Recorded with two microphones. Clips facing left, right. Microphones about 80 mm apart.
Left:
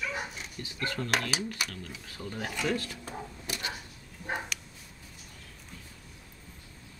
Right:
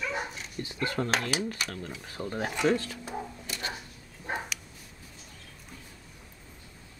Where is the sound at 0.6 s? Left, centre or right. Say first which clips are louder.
Right 4 dB; right.